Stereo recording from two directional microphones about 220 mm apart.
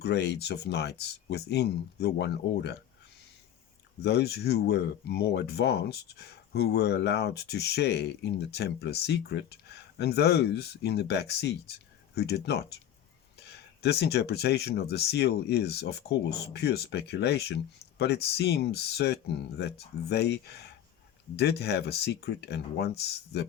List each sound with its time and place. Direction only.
0.0 s speech: 50° left (ahead or behind)
4.0 s speech: 50° left (ahead or behind)